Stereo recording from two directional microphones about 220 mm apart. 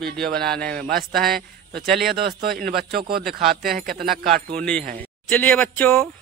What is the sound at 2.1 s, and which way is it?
Speech, 45° right (ahead or behind).